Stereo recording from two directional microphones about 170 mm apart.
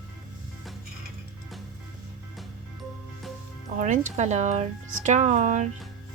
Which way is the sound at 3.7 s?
45° right (ahead or behind).